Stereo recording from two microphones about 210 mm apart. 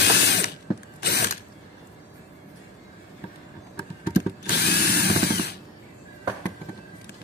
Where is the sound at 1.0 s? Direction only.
50° left (ahead or behind).